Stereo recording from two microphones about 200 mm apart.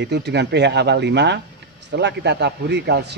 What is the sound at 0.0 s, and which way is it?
A man's voice, 60° right (ahead or behind).